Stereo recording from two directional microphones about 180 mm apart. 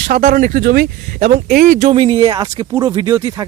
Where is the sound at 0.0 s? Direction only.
45° right (ahead or behind).